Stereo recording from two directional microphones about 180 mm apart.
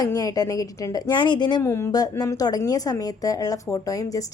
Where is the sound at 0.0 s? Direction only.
20° left (ahead or behind).